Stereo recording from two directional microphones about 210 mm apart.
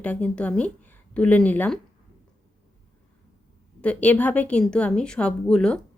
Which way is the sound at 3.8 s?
5° left (ahead or behind).